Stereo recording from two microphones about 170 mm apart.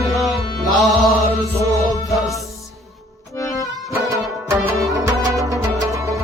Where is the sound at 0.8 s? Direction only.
Centre (ahead or behind).